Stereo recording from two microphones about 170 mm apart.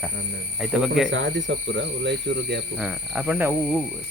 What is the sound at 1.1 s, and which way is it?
Speech, 90° right.